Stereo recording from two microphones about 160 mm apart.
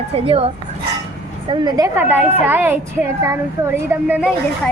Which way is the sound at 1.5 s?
25° right (ahead or behind).